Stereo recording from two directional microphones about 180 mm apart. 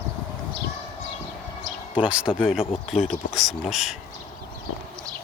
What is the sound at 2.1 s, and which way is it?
Speech, 5° right (ahead or behind).